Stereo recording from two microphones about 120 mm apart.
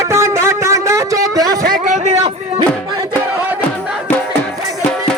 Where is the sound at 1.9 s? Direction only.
70° right (ahead or behind).